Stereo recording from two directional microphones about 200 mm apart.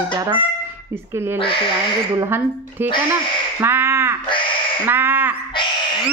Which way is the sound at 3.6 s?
10° right (ahead or behind).